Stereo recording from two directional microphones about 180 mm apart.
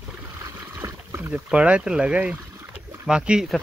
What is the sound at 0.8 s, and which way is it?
Speech, 10° right (ahead or behind).